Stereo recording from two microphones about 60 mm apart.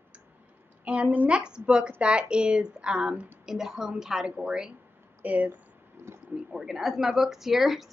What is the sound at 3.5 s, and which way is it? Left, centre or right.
Speech, centre.